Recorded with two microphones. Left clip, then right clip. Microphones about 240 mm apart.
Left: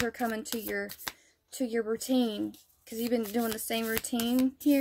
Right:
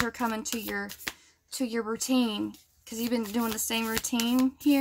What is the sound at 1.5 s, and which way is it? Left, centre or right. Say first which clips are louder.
Speech: even; centre.